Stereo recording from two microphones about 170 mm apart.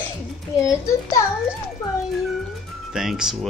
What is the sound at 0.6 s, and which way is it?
Speech, 20° left (ahead or behind).